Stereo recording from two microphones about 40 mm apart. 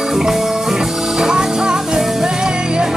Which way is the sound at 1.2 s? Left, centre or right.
Centre.